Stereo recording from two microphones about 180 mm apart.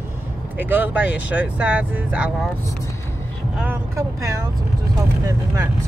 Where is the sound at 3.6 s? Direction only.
15° right (ahead or behind).